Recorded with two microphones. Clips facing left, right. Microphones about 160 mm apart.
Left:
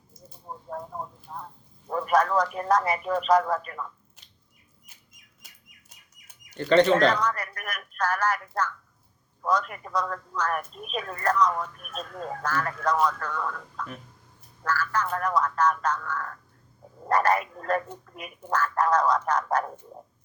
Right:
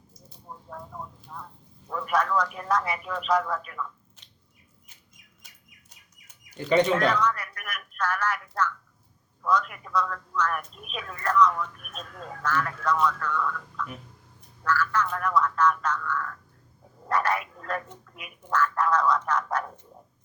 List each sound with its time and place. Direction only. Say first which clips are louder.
0.4 s vehicle: left 5 dB; 40° left (ahead or behind)
1.9 s a man's voice: left 3 dB; 40° left (ahead or behind)
6.5 s speech: left 3 dB; 10° right (ahead or behind)
7.1 s a man's voice: right 1 dB; 40° left (ahead or behind)